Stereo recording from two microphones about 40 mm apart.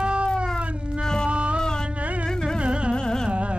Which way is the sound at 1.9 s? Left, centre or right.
Right.